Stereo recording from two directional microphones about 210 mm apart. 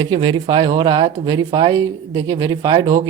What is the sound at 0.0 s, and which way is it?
Speech, 20° right (ahead or behind).